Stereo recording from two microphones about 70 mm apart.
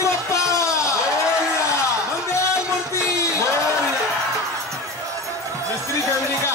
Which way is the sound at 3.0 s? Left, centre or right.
Left.